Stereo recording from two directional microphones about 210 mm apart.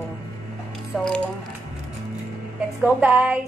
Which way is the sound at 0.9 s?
Centre (ahead or behind).